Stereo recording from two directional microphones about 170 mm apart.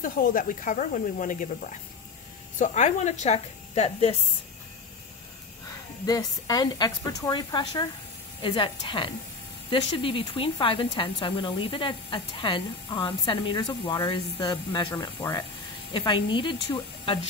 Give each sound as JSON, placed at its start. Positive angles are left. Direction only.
{"t": 0.0, "sound": "speech", "side_deg": 55}
{"t": 6.0, "sound": "speech", "side_deg": 20}